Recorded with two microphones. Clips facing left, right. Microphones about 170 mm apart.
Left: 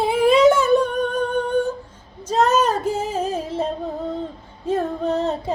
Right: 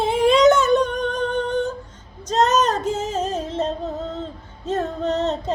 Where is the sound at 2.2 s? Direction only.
10° left (ahead or behind).